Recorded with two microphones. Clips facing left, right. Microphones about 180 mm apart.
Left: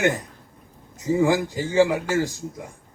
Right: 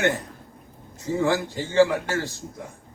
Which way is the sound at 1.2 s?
15° left (ahead or behind).